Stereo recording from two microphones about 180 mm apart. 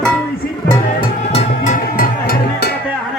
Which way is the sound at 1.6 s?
50° left (ahead or behind).